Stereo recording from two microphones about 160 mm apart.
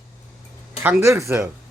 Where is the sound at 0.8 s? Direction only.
15° right (ahead or behind).